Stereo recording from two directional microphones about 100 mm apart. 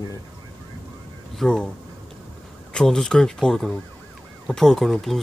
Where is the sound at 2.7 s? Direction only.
5° left (ahead or behind).